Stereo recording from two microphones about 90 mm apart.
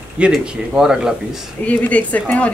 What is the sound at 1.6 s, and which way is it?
Speech, 15° left (ahead or behind).